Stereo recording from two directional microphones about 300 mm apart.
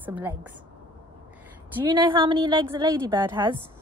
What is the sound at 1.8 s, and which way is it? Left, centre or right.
A woman's voice, centre.